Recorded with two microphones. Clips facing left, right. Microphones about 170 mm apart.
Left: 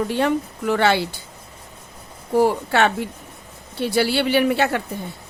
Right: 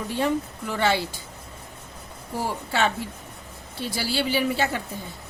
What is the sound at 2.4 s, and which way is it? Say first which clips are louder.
Speech: left 7 dB; 65° left (ahead or behind).